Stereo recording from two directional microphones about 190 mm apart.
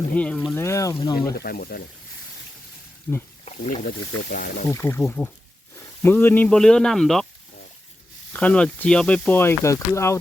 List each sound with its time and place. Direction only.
0.1 s speech: 5° left (ahead or behind)
1.3 s speech: 55° left (ahead or behind)
3.1 s speech: 10° left (ahead or behind)
3.4 s speech: 35° left (ahead or behind)
3.8 s speech: 45° left (ahead or behind)
4.7 s speech: 10° left (ahead or behind)
8.3 s speech: 5° left (ahead or behind)